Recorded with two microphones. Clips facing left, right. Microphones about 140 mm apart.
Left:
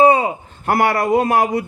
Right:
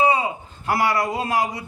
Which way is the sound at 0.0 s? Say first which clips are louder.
Left 7 dB; 55° left (ahead or behind).